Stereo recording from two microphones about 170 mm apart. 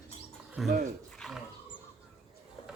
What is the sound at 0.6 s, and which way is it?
Speech, centre (ahead or behind).